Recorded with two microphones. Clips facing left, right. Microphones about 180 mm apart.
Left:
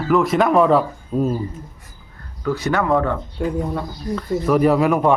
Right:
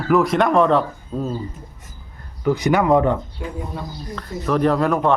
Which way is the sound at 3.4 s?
50° left (ahead or behind).